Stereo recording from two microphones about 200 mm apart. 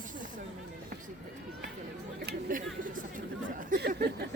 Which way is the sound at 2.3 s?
45° right (ahead or behind).